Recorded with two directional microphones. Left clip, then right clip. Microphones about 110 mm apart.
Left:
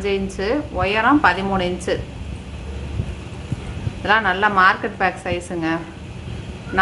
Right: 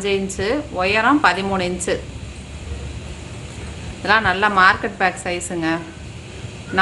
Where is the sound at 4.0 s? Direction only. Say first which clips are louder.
Right 1 dB; 25° right (ahead or behind).